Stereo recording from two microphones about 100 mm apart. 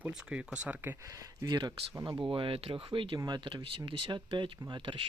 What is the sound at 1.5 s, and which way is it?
Speech, 45° right (ahead or behind).